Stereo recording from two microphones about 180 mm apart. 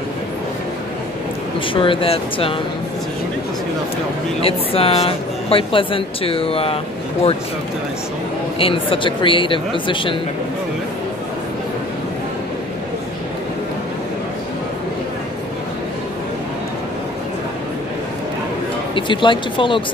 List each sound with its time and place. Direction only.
1.7 s speech: 30° left (ahead or behind)
4.4 s speech: 30° left (ahead or behind)
8.5 s speech: 30° left (ahead or behind)
18.9 s speech: 25° left (ahead or behind)